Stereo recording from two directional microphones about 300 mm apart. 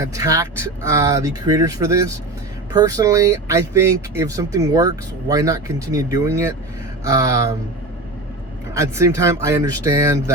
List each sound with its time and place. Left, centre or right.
0.0 s speech: centre
8.7 s speech: centre